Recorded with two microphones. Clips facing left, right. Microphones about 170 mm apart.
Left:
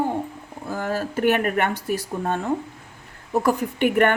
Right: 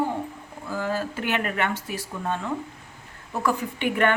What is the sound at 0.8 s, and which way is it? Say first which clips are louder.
A woman's voice: left 5 dB; 55° left (ahead or behind).